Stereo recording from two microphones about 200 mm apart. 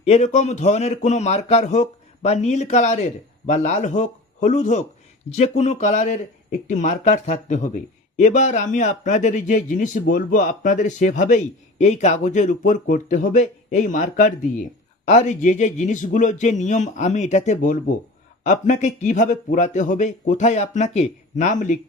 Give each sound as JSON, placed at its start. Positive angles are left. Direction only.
{"t": 0.0, "sound": "speech", "side_deg": 35}